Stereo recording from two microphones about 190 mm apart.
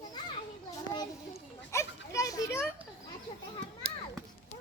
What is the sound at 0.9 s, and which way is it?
Children playing, 15° left (ahead or behind).